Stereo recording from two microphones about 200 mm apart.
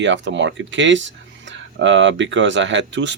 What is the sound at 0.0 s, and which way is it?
Speech, 65° right (ahead or behind).